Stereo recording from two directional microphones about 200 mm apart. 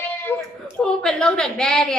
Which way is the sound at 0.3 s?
10° left (ahead or behind).